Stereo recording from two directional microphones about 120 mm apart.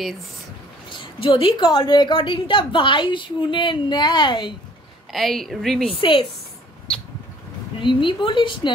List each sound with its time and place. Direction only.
0.8 s a woman's voice: 45° left (ahead or behind)
5.1 s a woman's voice: centre (ahead or behind)
5.9 s a woman's voice: 50° left (ahead or behind)
7.8 s a woman's voice: 45° left (ahead or behind)